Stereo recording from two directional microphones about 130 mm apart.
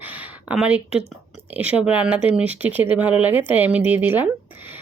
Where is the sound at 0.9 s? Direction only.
50° left (ahead or behind).